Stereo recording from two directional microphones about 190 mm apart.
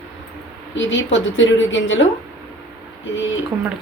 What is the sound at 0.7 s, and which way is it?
A woman's voice, 75° left (ahead or behind).